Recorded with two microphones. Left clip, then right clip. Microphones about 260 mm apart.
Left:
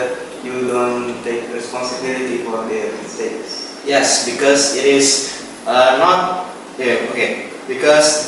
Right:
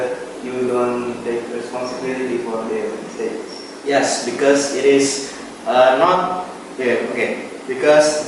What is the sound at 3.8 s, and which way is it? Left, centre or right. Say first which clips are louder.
A man's voice: left 3 dB; centre.